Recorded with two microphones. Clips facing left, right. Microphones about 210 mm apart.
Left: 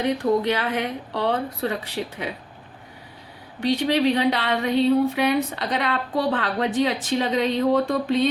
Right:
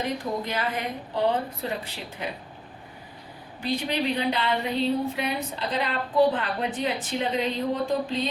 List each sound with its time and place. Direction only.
0.0 s speech: 70° left (ahead or behind)
3.6 s speech: 80° left